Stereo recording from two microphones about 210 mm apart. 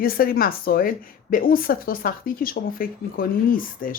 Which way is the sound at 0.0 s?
45° left (ahead or behind).